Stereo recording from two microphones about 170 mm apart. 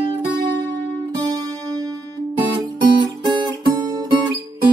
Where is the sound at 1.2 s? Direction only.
25° right (ahead or behind).